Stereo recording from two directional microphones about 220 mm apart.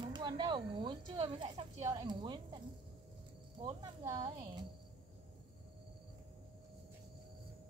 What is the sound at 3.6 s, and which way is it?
Speech, 15° right (ahead or behind).